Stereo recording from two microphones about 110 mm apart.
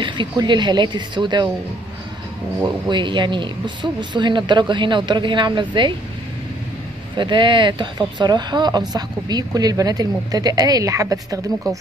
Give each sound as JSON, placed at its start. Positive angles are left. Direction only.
{"t": 0.0, "sound": "speech", "side_deg": -45}
{"t": 2.9, "sound": "speech", "side_deg": -45}
{"t": 7.2, "sound": "speech", "side_deg": -45}